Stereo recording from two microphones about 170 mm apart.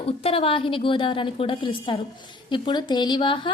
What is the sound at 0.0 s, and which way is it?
A woman's voice, 35° left (ahead or behind).